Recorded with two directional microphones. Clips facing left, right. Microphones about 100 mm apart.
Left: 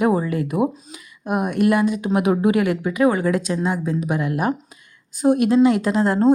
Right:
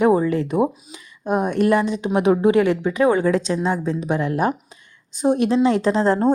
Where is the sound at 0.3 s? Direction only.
30° right (ahead or behind).